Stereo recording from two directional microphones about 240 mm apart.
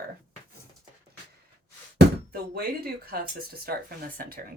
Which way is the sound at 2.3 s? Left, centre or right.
Right.